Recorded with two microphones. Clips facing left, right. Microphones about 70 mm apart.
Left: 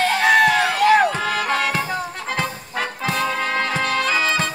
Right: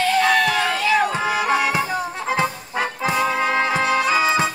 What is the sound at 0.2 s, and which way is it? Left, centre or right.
Music, left.